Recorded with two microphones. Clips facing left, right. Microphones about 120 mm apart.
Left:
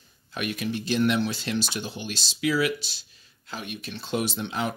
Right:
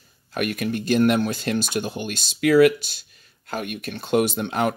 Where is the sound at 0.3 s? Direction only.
55° right (ahead or behind).